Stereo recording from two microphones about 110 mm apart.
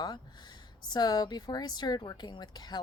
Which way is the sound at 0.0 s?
40° left (ahead or behind).